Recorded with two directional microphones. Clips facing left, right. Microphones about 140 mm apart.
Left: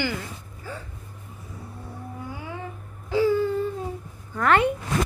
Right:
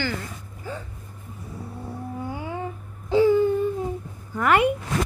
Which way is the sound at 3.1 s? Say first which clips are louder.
Right 4 dB; 20° right (ahead or behind).